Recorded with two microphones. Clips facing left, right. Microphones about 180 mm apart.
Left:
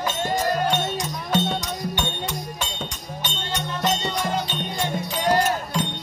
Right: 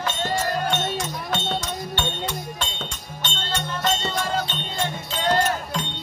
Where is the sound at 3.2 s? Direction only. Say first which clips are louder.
Right 1 dB; 10° left (ahead or behind).